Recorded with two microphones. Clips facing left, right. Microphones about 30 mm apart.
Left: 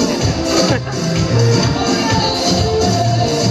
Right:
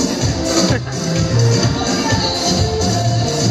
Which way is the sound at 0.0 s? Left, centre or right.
Centre.